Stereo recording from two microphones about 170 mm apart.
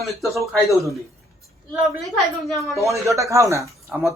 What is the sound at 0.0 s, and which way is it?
Speech, centre (ahead or behind).